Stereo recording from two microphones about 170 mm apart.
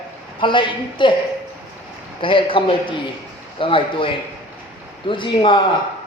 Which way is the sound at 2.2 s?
30° left (ahead or behind).